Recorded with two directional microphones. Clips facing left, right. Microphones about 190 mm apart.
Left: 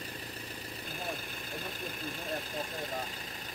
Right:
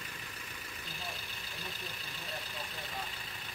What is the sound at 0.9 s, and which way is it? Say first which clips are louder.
Vehicle: left 7 dB; 50° left (ahead or behind).